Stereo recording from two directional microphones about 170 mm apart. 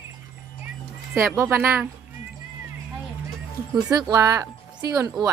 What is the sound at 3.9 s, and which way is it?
Speech, 20° right (ahead or behind).